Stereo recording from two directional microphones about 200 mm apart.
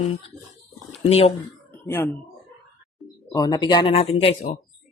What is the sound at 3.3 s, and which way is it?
Speech, 20° left (ahead or behind).